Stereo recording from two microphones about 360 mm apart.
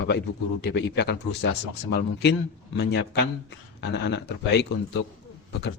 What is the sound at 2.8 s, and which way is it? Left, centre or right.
Speech, left.